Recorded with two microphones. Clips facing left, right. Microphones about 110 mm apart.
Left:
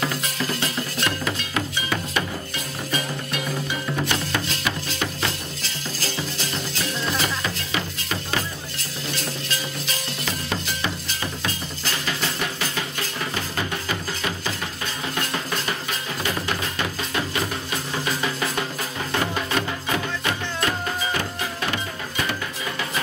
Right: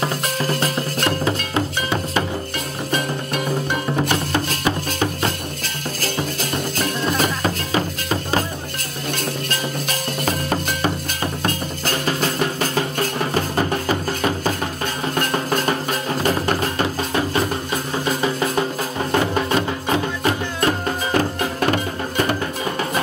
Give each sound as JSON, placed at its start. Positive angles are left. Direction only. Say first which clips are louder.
{"t": 0.2, "sound": "music", "louder": "right 5 dB", "side_deg": -45}
{"t": 2.9, "sound": "music", "louder": "right 5 dB", "side_deg": -45}
{"t": 9.1, "sound": "music", "louder": "right 6 dB", "side_deg": -50}
{"t": 18.2, "sound": "music", "louder": "right 6 dB", "side_deg": -30}